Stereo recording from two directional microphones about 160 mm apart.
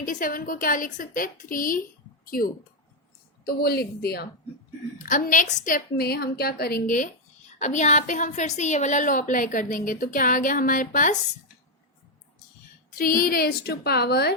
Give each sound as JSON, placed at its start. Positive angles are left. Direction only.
{"t": 0.0, "sound": "a woman's voice", "side_deg": 55}
{"t": 3.4, "sound": "a woman's voice", "side_deg": 75}
{"t": 4.9, "sound": "a woman's voice", "side_deg": 55}
{"t": 13.0, "sound": "a woman's voice", "side_deg": 60}